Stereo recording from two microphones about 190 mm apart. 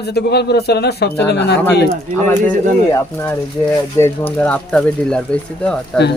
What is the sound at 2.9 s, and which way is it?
Speech, 15° left (ahead or behind).